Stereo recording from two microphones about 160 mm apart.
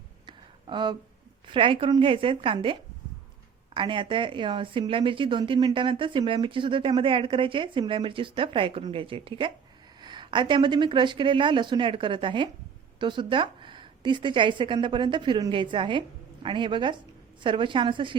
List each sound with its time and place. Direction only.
0.3 s a sound: 30° right (ahead or behind)
1.5 s speech: 30° right (ahead or behind)
3.8 s speech: 30° right (ahead or behind)